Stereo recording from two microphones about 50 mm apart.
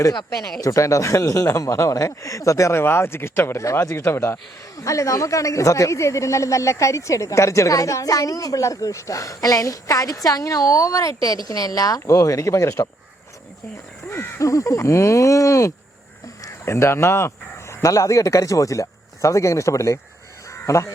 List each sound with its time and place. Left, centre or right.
0.7 s speech: left
2.7 s speech: left
3.8 s speech: left
4.8 s speech: left
14.1 s speech: left
16.4 s speech: left
17.8 s speech: left
20.5 s crow: left